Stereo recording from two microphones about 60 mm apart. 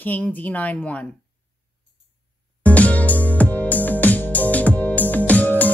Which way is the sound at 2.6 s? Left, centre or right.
Left.